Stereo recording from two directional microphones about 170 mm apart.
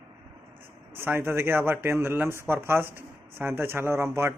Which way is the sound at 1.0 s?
15° right (ahead or behind).